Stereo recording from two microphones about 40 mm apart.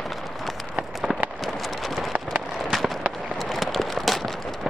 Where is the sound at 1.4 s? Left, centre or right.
Centre.